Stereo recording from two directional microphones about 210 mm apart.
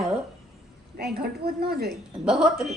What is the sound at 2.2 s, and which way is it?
Speech, 5° right (ahead or behind).